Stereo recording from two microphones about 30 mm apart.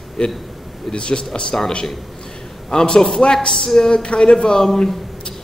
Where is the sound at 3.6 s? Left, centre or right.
Centre.